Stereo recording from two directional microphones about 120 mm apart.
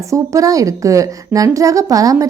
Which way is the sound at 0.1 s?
30° right (ahead or behind).